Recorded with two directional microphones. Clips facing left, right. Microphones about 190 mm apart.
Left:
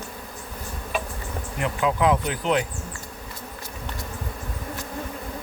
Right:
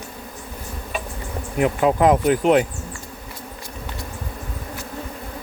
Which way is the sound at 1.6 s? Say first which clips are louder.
Right 6 dB; 50° right (ahead or behind).